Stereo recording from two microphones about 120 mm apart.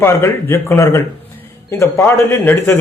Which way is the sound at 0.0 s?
20° left (ahead or behind).